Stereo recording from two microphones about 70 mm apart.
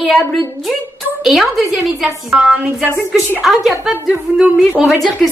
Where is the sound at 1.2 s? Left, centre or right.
Centre.